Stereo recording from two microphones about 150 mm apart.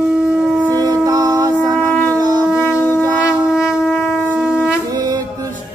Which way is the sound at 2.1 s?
25° right (ahead or behind).